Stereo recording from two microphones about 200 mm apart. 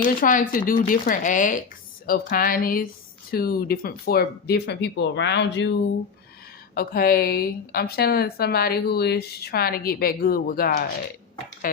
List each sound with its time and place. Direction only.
0.0 s a woman's voice: 45° left (ahead or behind); by 5.7 s 60° left (ahead or behind)
6.7 s a woman's voice: 50° left (ahead or behind)